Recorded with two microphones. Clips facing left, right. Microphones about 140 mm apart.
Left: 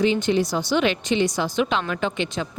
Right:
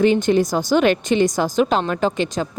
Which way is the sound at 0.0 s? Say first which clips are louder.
Right 4 dB; 50° right (ahead or behind).